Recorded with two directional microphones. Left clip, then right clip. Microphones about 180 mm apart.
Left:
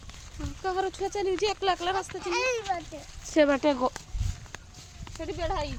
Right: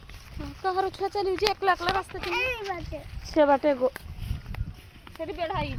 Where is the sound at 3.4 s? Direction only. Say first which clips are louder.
Right 2 dB; 25° left (ahead or behind).